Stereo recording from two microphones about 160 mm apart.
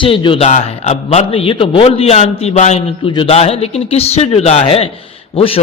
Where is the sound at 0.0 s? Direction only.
30° left (ahead or behind).